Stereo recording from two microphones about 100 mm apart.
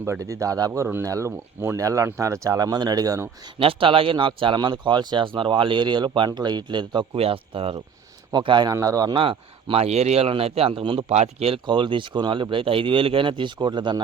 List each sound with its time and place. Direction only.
0.0 s speech: 30° right (ahead or behind)
3.6 s speech: 65° right (ahead or behind)
7.2 s speech: 70° right (ahead or behind)
8.3 s speech: 50° right (ahead or behind)
8.7 s speech: 35° right (ahead or behind)
9.1 s speech: 55° right (ahead or behind)
9.8 s a man's voice: 90° right
11.6 s speech: 55° right (ahead or behind)